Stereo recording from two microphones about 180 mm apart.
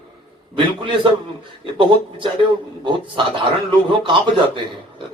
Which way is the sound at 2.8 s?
25° right (ahead or behind).